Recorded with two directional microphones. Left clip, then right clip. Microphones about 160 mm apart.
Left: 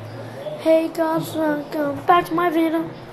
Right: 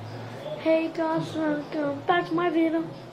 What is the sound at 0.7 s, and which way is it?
Child singing, 10° left (ahead or behind).